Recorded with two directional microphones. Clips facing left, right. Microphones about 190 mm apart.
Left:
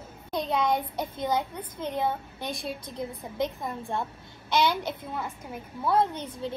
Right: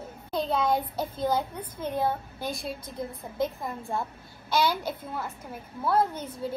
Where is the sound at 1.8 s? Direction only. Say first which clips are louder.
Right 1 dB; 10° right (ahead or behind).